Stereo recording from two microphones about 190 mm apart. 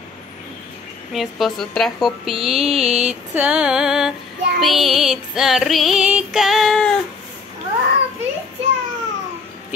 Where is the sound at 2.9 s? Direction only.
35° right (ahead or behind).